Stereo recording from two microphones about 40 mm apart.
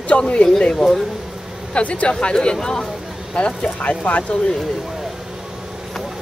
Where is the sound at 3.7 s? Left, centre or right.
Left.